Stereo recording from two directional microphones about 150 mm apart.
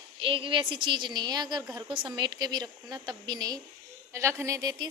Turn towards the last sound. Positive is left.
turn(degrees=-25)  # may be behind; listen again after turning